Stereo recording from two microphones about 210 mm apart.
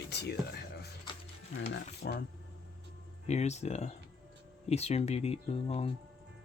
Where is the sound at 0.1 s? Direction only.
50° left (ahead or behind).